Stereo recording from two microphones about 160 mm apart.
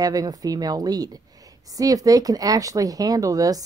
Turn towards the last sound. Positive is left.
turn(degrees=-20)  # may be behind; listen again after turning